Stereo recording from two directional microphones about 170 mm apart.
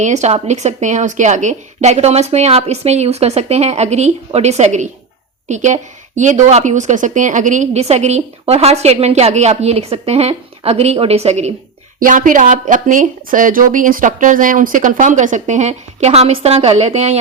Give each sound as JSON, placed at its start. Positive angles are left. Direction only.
{"t": 0.0, "sound": "a woman's voice", "side_deg": -45}
{"t": 11.9, "sound": "speech", "side_deg": -50}